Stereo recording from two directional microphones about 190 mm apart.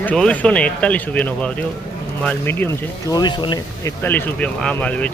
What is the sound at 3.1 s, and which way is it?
Speech, 20° left (ahead or behind).